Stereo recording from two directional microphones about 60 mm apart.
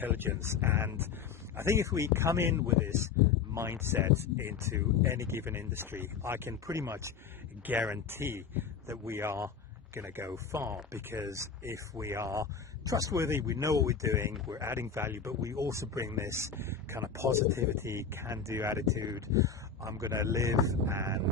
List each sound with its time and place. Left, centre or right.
0.0 s speech: right
1.5 s speech: right
6.5 s speech: right
7.7 s speech: right
8.1 s speech: right
10.9 s speech: right
11.3 s speech: right